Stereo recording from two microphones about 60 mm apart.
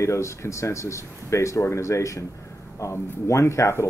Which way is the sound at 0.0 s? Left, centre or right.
Left.